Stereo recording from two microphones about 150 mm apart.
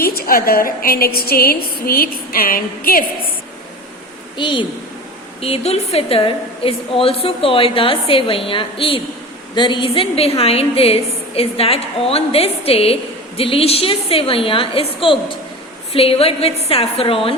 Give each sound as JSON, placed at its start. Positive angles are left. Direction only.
{"t": 0.0, "sound": "a woman's voice", "side_deg": 85}
{"t": 4.4, "sound": "a woman's voice", "side_deg": 35}